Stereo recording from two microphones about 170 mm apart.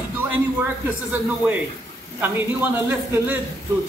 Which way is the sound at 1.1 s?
10° right (ahead or behind).